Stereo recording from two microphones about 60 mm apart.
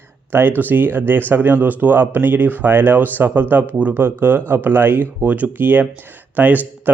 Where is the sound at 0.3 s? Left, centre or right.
Right.